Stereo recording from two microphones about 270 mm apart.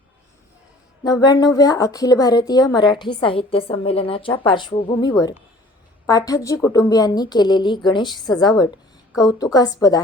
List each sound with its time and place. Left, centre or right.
1.0 s a woman's voice: centre